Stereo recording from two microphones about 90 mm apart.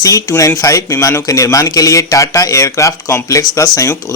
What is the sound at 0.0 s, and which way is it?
Speech, 40° left (ahead or behind).